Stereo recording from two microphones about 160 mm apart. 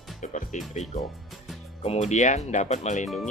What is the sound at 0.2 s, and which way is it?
Speech, 50° left (ahead or behind).